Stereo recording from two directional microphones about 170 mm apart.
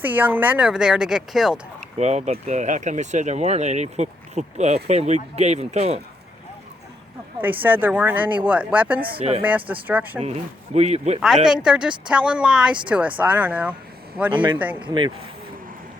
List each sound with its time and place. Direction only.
0.0 s speech: 10° right (ahead or behind)
2.0 s speech: 40° right (ahead or behind)
7.4 s speech: 10° right (ahead or behind)
9.1 s speech: 40° right (ahead or behind)
9.4 s speech: 10° right (ahead or behind)
10.8 s speech: 40° right (ahead or behind)
11.4 s speech: 5° right (ahead or behind)
14.3 s speech: 30° right (ahead or behind)